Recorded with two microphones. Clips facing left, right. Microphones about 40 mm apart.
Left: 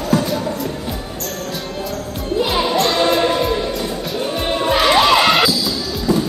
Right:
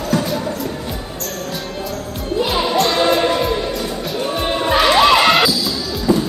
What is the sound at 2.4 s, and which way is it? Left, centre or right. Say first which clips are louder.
Music: even; centre.